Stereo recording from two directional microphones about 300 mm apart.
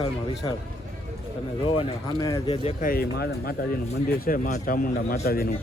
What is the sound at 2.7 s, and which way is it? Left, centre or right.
Speech, left.